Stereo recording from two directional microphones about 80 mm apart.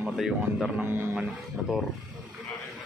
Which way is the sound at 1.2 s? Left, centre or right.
Centre.